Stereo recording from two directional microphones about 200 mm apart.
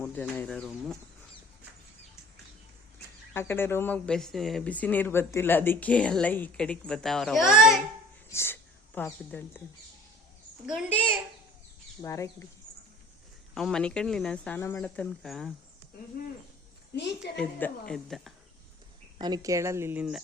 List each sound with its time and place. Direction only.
0.0 s speech: 10° left (ahead or behind)
3.3 s speech: 10° left (ahead or behind)
8.3 s speech: 10° left (ahead or behind)
10.7 s a woman's voice: 10° right (ahead or behind)
12.0 s speech: 15° left (ahead or behind)
13.5 s speech: centre (ahead or behind)
17.2 s speech: 5° left (ahead or behind)
19.2 s a woman's voice: 20° right (ahead or behind)